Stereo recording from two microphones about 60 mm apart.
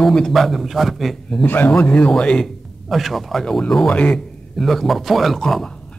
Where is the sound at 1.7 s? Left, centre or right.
Left.